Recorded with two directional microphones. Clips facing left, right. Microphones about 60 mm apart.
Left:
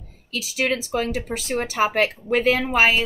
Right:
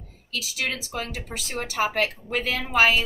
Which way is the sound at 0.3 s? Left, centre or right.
Left.